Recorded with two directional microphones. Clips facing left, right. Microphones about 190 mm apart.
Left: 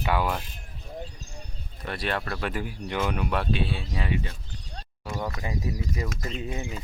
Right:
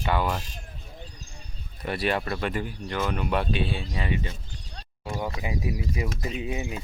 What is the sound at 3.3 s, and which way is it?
Speech, centre (ahead or behind).